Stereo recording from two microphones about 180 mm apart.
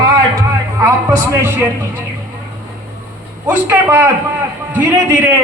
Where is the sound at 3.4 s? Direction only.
10° right (ahead or behind).